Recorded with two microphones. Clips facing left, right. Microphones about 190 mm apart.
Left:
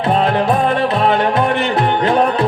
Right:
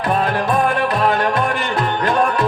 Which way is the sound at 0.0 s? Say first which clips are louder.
Left 4 dB; 25° left (ahead or behind).